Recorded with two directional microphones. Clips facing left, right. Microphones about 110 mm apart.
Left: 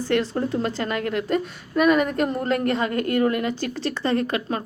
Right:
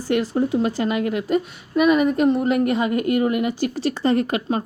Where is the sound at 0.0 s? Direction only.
10° right (ahead or behind).